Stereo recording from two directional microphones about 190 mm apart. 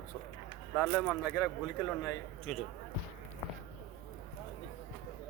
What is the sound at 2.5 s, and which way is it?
Speech, centre (ahead or behind).